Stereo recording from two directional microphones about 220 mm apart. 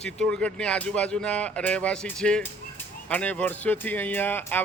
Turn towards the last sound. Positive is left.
turn(degrees=10)  # may be behind; listen again after turning